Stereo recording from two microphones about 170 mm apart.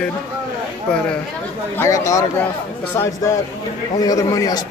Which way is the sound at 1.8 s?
20° left (ahead or behind).